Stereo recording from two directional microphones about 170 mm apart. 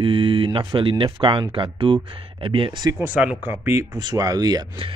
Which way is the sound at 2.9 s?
10° right (ahead or behind).